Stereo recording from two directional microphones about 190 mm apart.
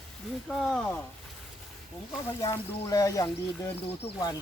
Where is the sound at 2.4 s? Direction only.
20° left (ahead or behind).